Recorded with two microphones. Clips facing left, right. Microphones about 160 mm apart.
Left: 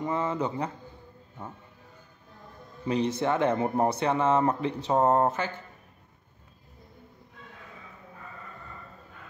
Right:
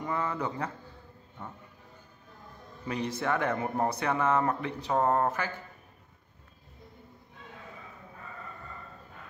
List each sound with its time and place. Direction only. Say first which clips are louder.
0.0 s speech: left 4 dB; 20° left (ahead or behind)
2.9 s speech: left 5 dB; 25° left (ahead or behind)